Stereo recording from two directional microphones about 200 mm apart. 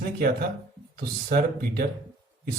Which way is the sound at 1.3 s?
50° right (ahead or behind).